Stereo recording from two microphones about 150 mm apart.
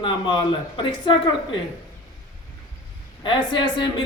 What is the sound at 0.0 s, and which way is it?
A woman's voice, 30° left (ahead or behind).